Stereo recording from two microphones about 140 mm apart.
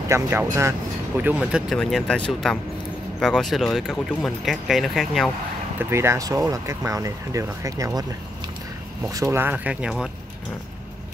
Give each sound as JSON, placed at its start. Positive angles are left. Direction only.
{"t": 0.1, "sound": "speech", "side_deg": -20}
{"t": 1.4, "sound": "speech", "side_deg": 0}
{"t": 5.8, "sound": "speech", "side_deg": -20}
{"t": 9.1, "sound": "speech", "side_deg": -20}